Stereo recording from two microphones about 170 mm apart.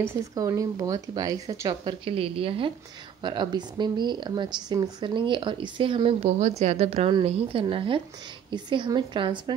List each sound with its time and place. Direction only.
0.0 s speech: 15° right (ahead or behind)
2.0 s a woman's voice: 35° right (ahead or behind)